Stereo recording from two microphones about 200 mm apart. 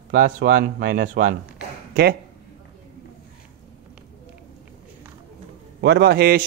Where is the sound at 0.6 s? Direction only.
55° right (ahead or behind).